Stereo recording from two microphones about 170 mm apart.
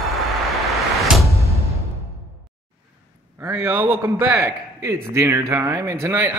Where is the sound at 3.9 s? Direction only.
10° right (ahead or behind).